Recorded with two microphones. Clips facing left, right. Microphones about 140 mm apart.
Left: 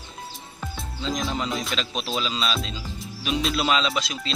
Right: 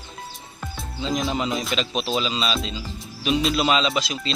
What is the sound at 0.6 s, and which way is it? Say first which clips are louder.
Speech: right 3 dB; 5° right (ahead or behind).